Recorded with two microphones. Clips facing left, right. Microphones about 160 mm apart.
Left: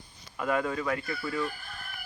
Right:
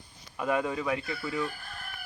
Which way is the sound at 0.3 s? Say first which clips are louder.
Even; 15° right (ahead or behind).